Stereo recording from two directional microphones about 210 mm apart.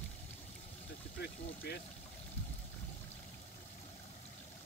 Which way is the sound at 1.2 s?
50° left (ahead or behind).